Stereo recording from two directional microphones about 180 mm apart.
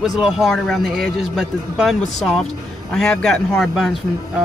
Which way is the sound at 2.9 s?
5° left (ahead or behind).